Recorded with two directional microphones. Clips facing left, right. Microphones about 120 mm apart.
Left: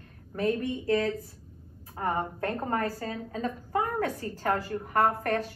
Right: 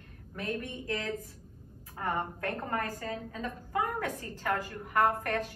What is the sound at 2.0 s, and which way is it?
A woman's voice, 35° left (ahead or behind).